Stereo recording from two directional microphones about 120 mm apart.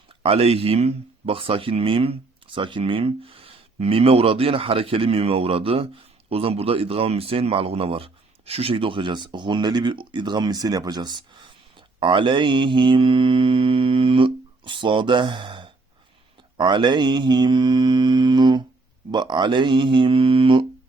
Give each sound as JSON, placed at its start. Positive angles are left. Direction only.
{"t": 0.2, "sound": "speech", "side_deg": -55}
{"t": 11.9, "sound": "mantra", "side_deg": -40}